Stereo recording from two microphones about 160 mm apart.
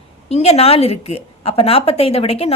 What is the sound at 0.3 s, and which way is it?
A woman's voice, 40° left (ahead or behind).